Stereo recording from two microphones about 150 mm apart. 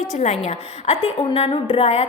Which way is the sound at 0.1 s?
50° left (ahead or behind).